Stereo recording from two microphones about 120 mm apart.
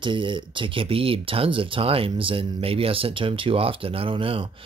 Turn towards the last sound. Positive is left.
turn(degrees=-50)  # may be behind; listen again after turning